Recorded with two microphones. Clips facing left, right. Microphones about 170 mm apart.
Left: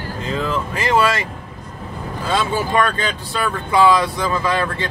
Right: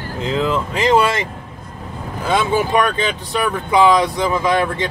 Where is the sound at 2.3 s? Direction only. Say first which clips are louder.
Right 3 dB; 15° right (ahead or behind).